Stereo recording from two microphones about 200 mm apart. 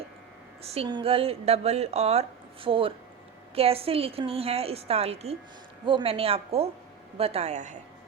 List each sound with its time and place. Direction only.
0.6 s a woman's voice: 30° right (ahead or behind)